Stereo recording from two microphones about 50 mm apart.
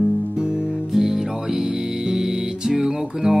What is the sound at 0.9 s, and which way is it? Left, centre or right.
Music, centre.